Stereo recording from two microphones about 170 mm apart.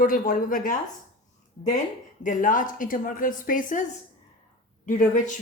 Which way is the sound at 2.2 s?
50° left (ahead or behind).